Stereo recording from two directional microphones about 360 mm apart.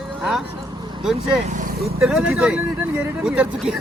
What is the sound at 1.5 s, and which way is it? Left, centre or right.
Vehicle, right.